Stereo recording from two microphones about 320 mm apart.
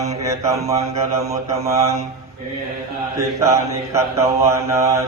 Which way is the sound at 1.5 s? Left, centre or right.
Centre.